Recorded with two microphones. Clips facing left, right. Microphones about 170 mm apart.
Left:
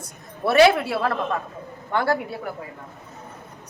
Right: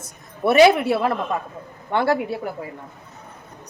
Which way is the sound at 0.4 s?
20° right (ahead or behind).